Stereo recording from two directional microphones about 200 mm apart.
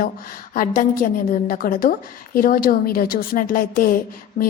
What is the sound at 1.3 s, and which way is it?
A woman's voice, 45° left (ahead or behind).